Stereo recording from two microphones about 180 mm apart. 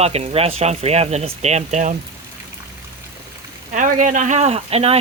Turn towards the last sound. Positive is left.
turn(degrees=-35)  # may be behind; listen again after turning